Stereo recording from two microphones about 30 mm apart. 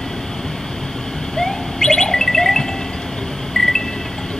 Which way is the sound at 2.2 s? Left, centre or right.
Centre.